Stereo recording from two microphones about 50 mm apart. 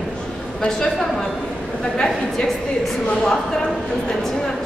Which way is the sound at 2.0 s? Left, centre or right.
Centre.